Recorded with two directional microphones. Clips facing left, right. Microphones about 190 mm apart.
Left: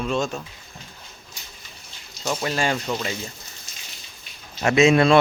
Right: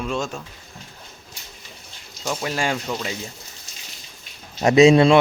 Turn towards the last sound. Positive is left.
turn(degrees=-25)  # may be behind; listen again after turning